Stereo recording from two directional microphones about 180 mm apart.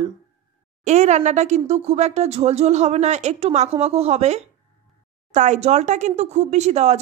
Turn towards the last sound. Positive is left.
turn(degrees=-40)  # may be behind; listen again after turning